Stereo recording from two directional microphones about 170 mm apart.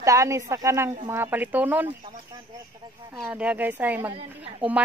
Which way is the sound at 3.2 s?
10° right (ahead or behind).